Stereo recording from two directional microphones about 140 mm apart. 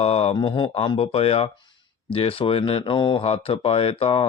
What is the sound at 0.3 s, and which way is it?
Speech, 35° left (ahead or behind).